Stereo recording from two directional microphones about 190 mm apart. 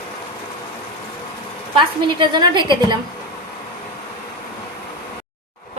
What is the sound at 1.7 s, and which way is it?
A woman's voice, 25° right (ahead or behind).